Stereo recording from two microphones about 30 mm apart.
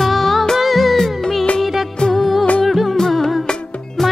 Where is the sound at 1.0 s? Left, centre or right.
Centre.